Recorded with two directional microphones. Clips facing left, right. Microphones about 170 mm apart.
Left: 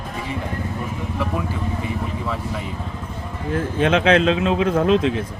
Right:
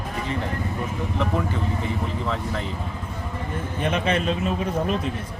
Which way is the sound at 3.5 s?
90° left.